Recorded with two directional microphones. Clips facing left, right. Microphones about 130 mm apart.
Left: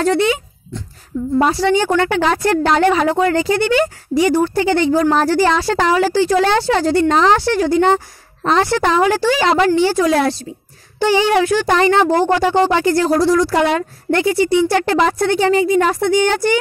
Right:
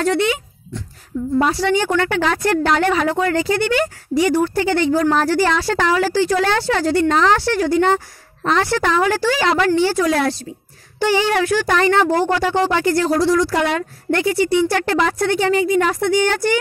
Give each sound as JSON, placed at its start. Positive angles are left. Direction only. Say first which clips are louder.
{"t": 0.0, "sound": "a woman's voice", "louder": "left 3 dB", "side_deg": 30}